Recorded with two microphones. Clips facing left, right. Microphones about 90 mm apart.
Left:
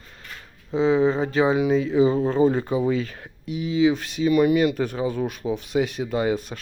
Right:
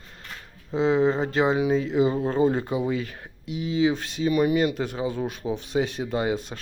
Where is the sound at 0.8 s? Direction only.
35° right (ahead or behind).